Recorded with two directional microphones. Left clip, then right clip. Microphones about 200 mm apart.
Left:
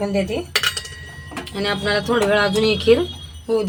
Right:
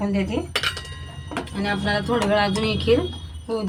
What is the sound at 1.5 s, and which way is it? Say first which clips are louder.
Speech: left 4 dB; 50° left (ahead or behind).